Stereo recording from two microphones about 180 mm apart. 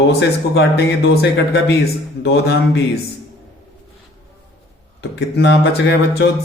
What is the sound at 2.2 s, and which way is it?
Speech, 70° left (ahead or behind).